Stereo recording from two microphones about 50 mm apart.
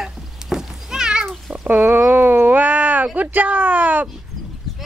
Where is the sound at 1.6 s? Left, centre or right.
Right.